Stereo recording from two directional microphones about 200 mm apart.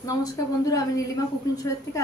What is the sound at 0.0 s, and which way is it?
A woman's voice, 15° left (ahead or behind).